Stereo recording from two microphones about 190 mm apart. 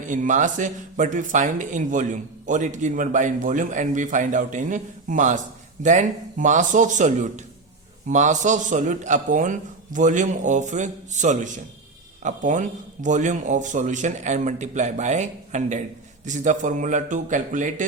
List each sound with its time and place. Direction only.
0.0 s a man's voice: 40° right (ahead or behind)